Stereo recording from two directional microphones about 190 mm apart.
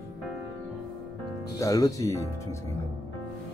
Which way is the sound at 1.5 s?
20° left (ahead or behind).